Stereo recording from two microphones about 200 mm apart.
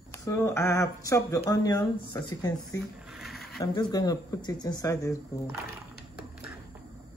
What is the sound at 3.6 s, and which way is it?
Speech, 20° left (ahead or behind).